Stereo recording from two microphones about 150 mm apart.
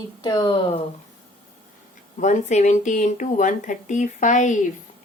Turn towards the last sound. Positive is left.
turn(degrees=55)  # may be behind; listen again after turning